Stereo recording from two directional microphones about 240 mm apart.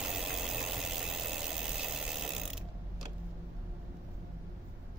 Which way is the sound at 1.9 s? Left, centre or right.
Centre.